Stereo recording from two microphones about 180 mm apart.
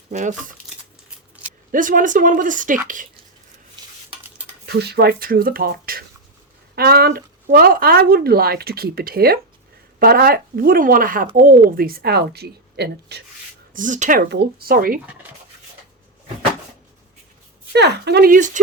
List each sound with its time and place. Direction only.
0.1 s speech: 45° right (ahead or behind)
1.7 s speech: 50° right (ahead or behind)
4.6 s speech: 65° right (ahead or behind)
13.7 s speech: 45° right (ahead or behind)
14.3 s speech: 60° right (ahead or behind)
17.7 s speech: 70° right (ahead or behind); by 18.6 s 45° right (ahead or behind)